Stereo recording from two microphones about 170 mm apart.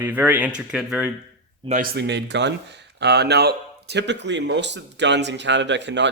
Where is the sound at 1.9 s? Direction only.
85° right.